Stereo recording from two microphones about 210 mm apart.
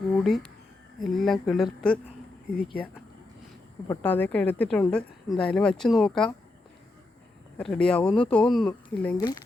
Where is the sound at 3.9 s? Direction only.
10° left (ahead or behind).